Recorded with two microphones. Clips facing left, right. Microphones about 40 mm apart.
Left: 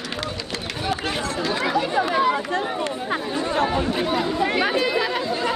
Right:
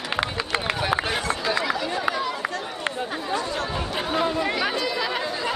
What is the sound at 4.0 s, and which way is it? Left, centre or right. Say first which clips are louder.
Speech: left 1 dB; centre.